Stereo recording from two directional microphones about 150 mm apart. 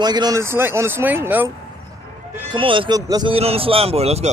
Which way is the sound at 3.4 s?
40° right (ahead or behind).